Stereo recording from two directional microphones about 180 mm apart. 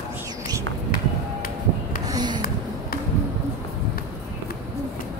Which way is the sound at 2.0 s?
25° right (ahead or behind).